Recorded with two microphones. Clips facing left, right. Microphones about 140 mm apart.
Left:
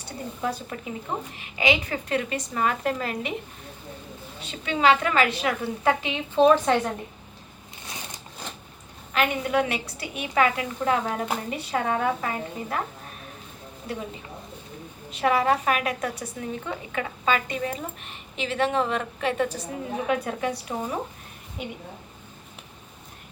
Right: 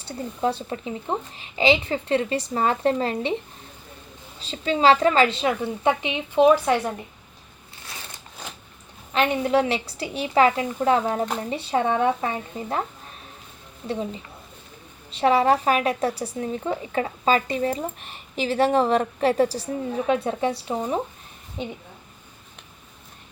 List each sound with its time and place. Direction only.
0.0 s a woman's voice: 30° right (ahead or behind)
4.4 s a woman's voice: 30° right (ahead or behind); by 6.9 s 10° right (ahead or behind)
7.9 s a sound: 20° left (ahead or behind)
9.1 s a woman's voice: 30° right (ahead or behind)
15.1 s a woman's voice: 30° right (ahead or behind)